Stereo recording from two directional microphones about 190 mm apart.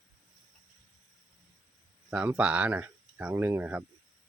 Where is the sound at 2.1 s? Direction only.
5° right (ahead or behind).